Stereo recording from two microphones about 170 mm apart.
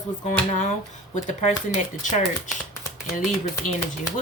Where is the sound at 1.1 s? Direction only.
45° left (ahead or behind).